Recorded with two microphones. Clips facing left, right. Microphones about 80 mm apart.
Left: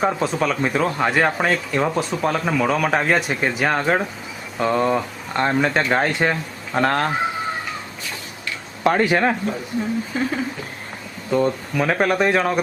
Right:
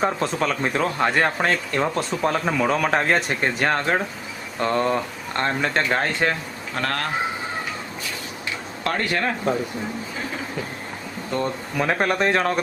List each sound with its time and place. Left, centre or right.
0.0 s speech: centre
6.7 s speech: left
8.8 s speech: centre
11.3 s speech: centre